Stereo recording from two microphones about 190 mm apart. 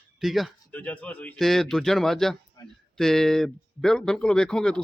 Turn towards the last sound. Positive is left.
turn(degrees=5)  # may be behind; listen again after turning